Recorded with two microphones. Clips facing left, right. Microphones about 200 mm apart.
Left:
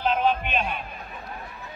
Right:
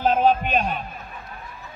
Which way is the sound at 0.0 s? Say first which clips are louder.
Right 4 dB; 45° right (ahead or behind).